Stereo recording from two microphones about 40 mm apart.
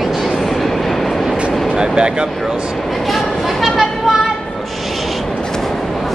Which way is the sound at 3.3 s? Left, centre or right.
Centre.